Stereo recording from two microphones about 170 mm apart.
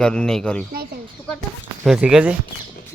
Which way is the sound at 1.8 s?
5° right (ahead or behind).